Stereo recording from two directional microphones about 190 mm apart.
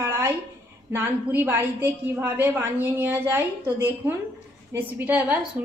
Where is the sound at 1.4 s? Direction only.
10° right (ahead or behind).